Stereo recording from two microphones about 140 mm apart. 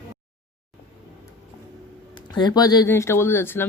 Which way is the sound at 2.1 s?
30° left (ahead or behind).